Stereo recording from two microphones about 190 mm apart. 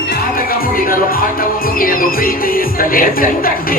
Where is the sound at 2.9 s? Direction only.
50° left (ahead or behind).